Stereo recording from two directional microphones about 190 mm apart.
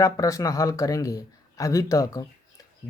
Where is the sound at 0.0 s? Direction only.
15° left (ahead or behind).